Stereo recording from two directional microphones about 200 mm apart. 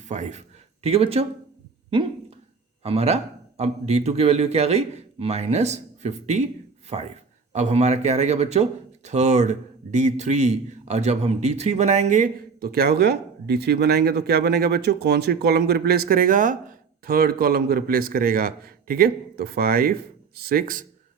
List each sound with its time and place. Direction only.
0.1 s a man's voice: 35° right (ahead or behind)
2.8 s a man's voice: 30° right (ahead or behind); by 20.8 s 45° right (ahead or behind)